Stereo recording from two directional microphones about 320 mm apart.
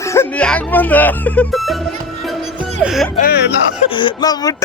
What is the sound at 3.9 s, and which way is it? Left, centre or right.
Speech, centre.